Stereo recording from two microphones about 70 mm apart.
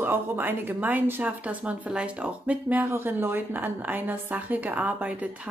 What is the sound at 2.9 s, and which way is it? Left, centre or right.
Speech, right.